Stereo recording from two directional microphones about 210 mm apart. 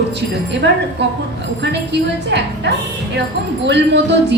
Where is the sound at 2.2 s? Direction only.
55° right (ahead or behind).